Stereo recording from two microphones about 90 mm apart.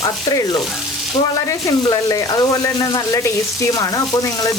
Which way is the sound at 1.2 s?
90° left.